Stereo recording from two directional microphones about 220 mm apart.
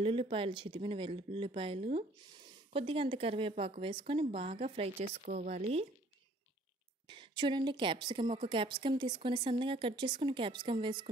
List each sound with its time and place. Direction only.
0.0 s a woman's voice: 25° right (ahead or behind)
7.1 s a woman's voice: 20° right (ahead or behind)